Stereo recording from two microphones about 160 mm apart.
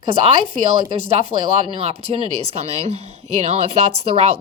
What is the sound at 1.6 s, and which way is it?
Speech, 40° right (ahead or behind).